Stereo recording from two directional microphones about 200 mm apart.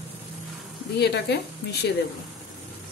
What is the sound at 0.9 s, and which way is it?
Speech, 55° left (ahead or behind).